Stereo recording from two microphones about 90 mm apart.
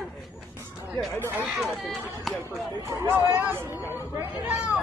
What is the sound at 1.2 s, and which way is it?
Chatter, 25° right (ahead or behind).